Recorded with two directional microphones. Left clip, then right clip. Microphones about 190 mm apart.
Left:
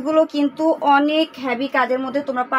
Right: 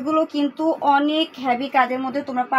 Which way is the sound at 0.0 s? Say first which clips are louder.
Left 3 dB; 45° left (ahead or behind).